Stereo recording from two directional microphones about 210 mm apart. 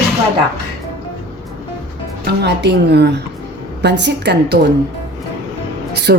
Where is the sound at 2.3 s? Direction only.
50° right (ahead or behind).